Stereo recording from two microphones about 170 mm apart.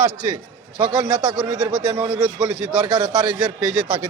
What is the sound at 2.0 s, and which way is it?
Speech, 20° right (ahead or behind).